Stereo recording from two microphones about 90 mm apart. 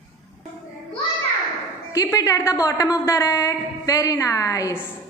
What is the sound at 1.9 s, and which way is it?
A woman's voice, 35° left (ahead or behind).